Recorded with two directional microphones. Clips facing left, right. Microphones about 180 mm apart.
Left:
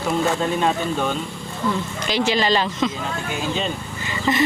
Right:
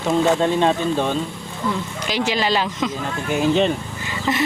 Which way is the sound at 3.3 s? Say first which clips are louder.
Right 9 dB; 55° right (ahead or behind).